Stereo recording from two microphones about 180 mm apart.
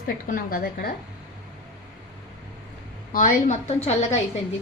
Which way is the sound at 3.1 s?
45° left (ahead or behind).